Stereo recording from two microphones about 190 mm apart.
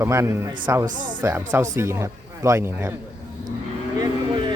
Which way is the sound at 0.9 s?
45° right (ahead or behind).